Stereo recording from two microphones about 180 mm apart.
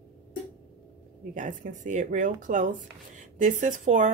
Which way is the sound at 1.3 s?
45° right (ahead or behind).